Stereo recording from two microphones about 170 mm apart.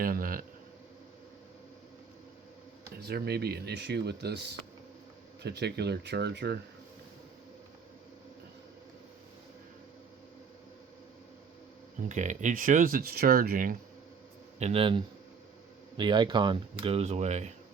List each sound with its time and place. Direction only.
0.0 s a man's voice: 55° right (ahead or behind)
3.0 s speech: 70° right (ahead or behind)
12.0 s speech: 45° right (ahead or behind)
14.6 s speech: 35° right (ahead or behind)